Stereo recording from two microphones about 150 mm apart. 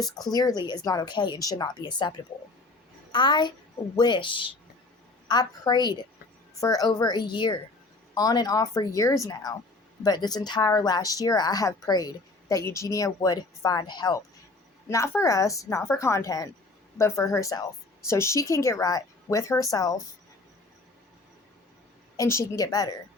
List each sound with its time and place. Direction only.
0.3 s speech: 25° left (ahead or behind)
22.2 s speech: 20° left (ahead or behind)